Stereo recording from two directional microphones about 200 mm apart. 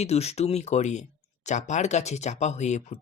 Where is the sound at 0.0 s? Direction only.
30° left (ahead or behind).